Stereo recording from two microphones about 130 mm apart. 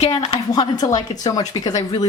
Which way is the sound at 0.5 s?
30° left (ahead or behind).